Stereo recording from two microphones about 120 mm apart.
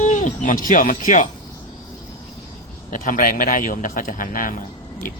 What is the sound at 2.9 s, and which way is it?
Speech, 90° left.